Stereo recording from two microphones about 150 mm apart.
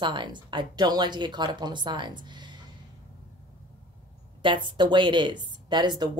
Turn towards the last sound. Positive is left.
turn(degrees=-30)  # may be behind; listen again after turning